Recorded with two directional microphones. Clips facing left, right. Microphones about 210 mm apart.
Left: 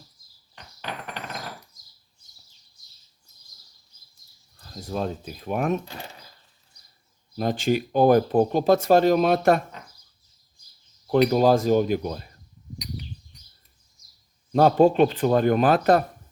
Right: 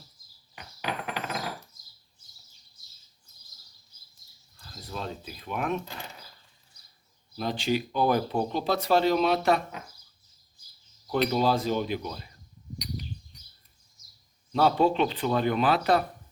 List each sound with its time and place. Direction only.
0.5 s a sound: 10° right (ahead or behind)
4.8 s speech: 45° left (ahead or behind)
7.3 s speech: 50° left (ahead or behind)
11.1 s speech: 45° left (ahead or behind)
14.5 s speech: 45° left (ahead or behind)